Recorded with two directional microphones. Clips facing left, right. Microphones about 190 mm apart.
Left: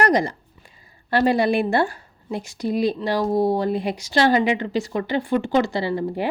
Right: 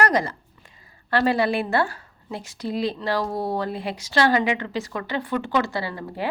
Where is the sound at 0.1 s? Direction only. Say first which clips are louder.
Left 3 dB; 15° left (ahead or behind).